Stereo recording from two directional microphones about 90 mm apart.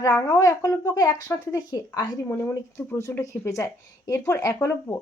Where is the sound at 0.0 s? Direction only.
40° left (ahead or behind).